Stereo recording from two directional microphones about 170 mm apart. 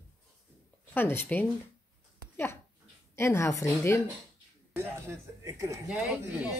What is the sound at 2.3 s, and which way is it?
Dog, 15° left (ahead or behind).